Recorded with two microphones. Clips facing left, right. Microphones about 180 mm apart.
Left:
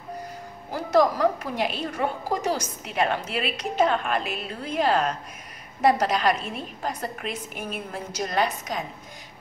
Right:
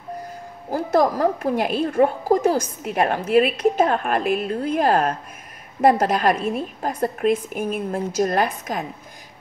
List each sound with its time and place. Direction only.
0.7 s a woman's voice: 50° right (ahead or behind)